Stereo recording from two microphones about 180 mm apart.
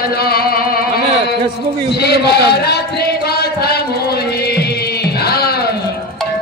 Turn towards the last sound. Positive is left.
turn(degrees=60)  # may be behind; listen again after turning